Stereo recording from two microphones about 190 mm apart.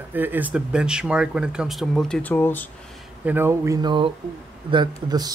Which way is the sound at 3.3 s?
10° right (ahead or behind).